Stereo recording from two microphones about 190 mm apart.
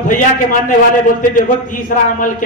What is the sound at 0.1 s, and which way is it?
A man's voice, 45° left (ahead or behind).